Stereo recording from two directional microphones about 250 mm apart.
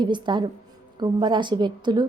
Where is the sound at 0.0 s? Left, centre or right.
Centre.